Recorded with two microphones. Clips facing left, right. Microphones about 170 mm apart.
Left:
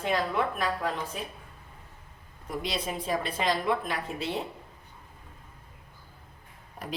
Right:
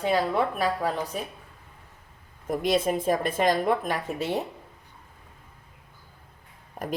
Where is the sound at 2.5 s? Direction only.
50° right (ahead or behind).